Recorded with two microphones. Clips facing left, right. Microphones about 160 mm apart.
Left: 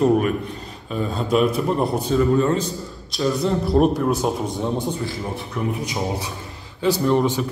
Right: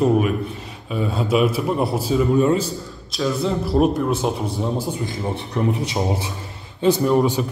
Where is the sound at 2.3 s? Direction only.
15° right (ahead or behind).